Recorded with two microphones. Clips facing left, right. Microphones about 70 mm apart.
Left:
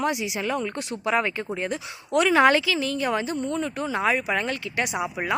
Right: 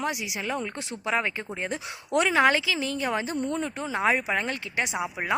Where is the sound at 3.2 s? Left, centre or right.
Right.